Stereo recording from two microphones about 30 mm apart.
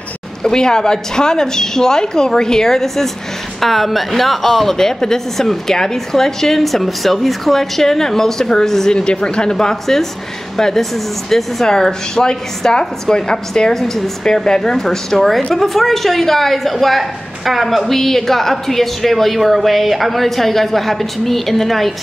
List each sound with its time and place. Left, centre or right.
0.4 s a woman's voice: left
3.6 s a woman's voice: centre
6.6 s a woman's voice: centre
8.9 s a woman's voice: left
10.6 s a woman's voice: centre
11.6 s a woman's voice: centre
17.9 s a woman's voice: centre